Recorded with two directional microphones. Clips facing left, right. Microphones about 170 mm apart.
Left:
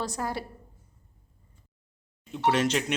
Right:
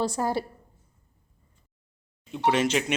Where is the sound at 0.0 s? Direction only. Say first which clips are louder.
Right 5 dB; 30° right (ahead or behind).